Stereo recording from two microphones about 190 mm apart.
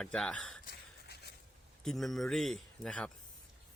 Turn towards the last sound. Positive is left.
turn(degrees=5)  # may be behind; listen again after turning